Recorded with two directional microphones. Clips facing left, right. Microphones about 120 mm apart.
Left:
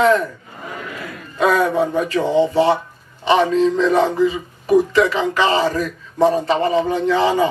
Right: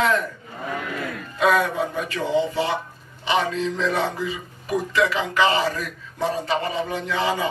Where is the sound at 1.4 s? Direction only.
35° left (ahead or behind).